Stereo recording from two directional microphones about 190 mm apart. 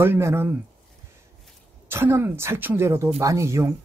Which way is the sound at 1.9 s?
10° right (ahead or behind).